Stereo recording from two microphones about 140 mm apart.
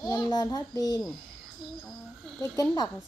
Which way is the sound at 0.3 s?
30° left (ahead or behind).